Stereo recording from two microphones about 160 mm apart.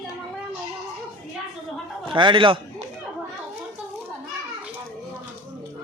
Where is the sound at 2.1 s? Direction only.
30° right (ahead or behind).